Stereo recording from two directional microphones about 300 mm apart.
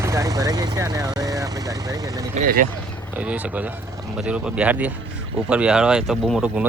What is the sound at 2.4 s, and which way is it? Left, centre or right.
Speech, right.